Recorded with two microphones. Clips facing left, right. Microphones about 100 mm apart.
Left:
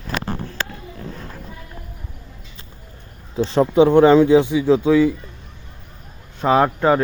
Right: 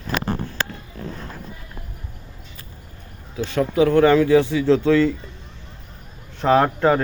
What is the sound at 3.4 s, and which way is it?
Speech, 30° left (ahead or behind).